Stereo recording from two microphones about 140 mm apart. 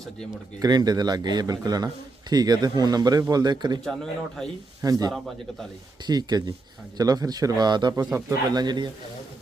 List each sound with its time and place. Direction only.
0.6 s speech: 30° right (ahead or behind)
4.8 s speech: 25° right (ahead or behind)